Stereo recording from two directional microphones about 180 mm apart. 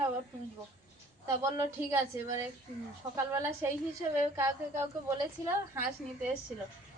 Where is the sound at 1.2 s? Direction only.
15° right (ahead or behind).